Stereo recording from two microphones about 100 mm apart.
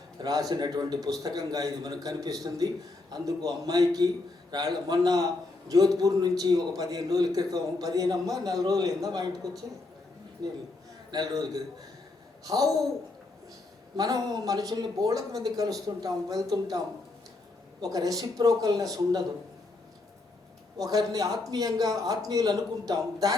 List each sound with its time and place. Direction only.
0.2 s a man's voice: 40° right (ahead or behind)
11.1 s a man's voice: 40° right (ahead or behind)
13.9 s a man's voice: 40° right (ahead or behind)
20.7 s a man's voice: 40° right (ahead or behind)